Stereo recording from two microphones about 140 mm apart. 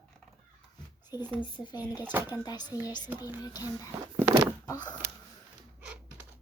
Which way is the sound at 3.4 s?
25° left (ahead or behind).